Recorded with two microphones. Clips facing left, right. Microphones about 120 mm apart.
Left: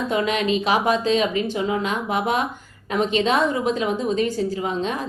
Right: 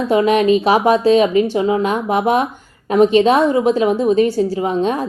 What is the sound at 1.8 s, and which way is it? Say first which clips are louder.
Speech: right 7 dB; 40° right (ahead or behind).